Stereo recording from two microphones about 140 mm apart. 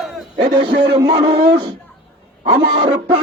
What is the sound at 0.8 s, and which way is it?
Music, 35° right (ahead or behind).